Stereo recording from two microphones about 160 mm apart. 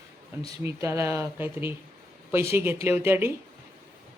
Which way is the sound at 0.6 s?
15° right (ahead or behind).